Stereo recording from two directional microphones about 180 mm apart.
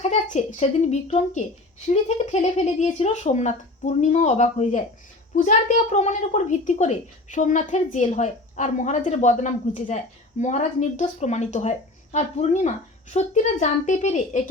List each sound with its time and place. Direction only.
0.0 s a woman's voice: 40° left (ahead or behind)